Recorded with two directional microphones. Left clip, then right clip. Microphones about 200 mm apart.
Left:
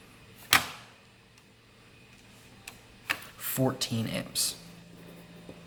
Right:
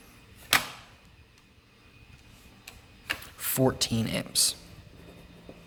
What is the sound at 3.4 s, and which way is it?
Speech, 50° right (ahead or behind).